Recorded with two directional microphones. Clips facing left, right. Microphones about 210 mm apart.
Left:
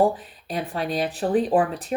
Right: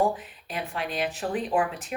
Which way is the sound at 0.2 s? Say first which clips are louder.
Left 5 dB; 35° left (ahead or behind).